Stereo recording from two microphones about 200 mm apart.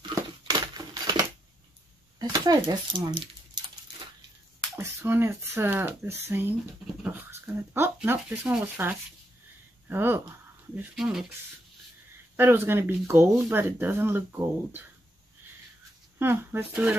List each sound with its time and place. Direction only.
0.0 s crumpling: 20° right (ahead or behind)
2.1 s speech: 20° right (ahead or behind)
4.7 s speech: 10° right (ahead or behind)
12.4 s speech: 10° right (ahead or behind)
16.2 s speech: 10° right (ahead or behind)